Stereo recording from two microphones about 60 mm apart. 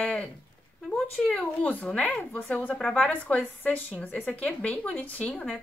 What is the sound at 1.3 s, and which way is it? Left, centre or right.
A woman's voice, left.